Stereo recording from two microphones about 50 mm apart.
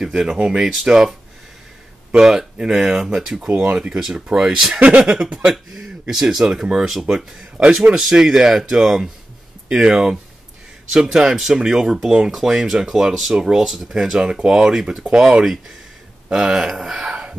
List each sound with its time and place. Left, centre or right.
0.0 s speech: centre
2.1 s speech: centre
3.5 s speech: right
4.7 s speech: right